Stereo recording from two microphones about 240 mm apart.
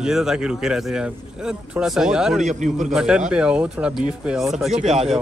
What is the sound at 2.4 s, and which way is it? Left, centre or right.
Speech, right.